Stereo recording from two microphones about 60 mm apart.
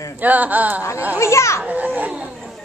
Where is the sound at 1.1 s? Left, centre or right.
Left.